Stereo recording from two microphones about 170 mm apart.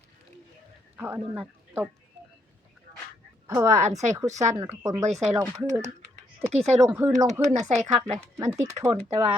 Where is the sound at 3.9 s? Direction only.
40° right (ahead or behind).